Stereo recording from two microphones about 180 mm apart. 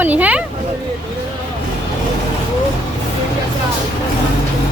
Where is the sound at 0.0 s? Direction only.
10° right (ahead or behind).